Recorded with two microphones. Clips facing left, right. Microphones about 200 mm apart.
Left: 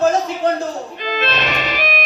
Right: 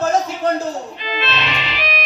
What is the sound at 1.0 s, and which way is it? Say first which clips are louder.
Music: left 4 dB; 45° left (ahead or behind).